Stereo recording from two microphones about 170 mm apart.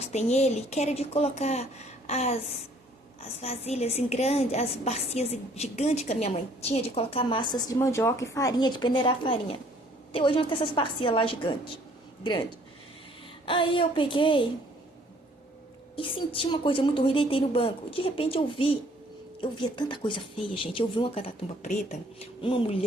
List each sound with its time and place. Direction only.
0.0 s a woman's voice: 40° left (ahead or behind)
13.4 s a woman's voice: 30° left (ahead or behind)
16.0 s a woman's voice: 30° left (ahead or behind)